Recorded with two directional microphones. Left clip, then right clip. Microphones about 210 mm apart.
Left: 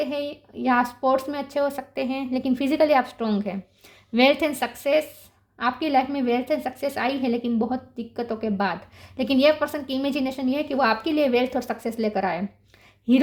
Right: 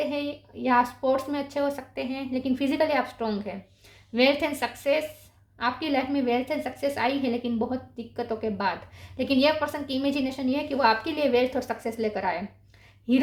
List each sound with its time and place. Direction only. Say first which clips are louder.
0.0 s a woman's voice: left 2 dB; 45° left (ahead or behind)